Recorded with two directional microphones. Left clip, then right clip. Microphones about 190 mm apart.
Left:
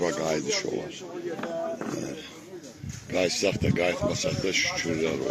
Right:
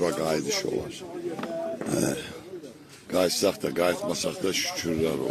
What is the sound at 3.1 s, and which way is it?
Speech, 30° right (ahead or behind).